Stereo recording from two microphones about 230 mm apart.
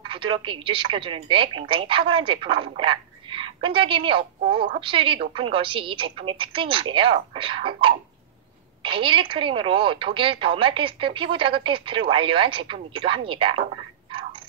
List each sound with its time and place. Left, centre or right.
0.0 s speech: right